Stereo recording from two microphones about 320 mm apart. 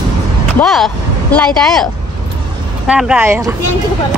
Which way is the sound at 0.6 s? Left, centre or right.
Centre.